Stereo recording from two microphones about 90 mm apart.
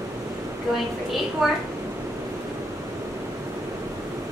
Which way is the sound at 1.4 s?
5° right (ahead or behind).